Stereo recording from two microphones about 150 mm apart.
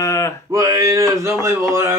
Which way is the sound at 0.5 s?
25° right (ahead or behind).